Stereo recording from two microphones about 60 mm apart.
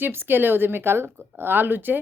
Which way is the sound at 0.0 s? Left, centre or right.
Right.